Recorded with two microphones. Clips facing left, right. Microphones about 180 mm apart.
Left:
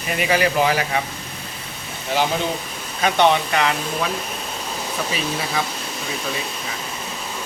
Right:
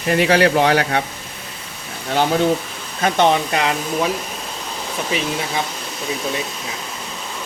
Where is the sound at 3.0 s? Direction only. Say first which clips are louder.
Right 1 dB; 45° right (ahead or behind).